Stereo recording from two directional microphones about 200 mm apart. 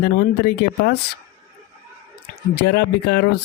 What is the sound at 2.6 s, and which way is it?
Speech, 55° left (ahead or behind).